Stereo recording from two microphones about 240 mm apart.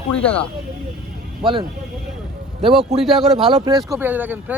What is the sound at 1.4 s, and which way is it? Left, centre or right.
Speech, right.